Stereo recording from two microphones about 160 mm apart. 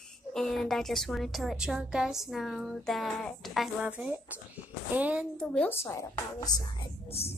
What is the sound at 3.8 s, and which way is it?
Speech, 10° right (ahead or behind).